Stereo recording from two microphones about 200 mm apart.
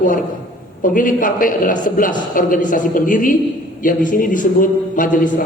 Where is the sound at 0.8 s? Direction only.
40° left (ahead or behind).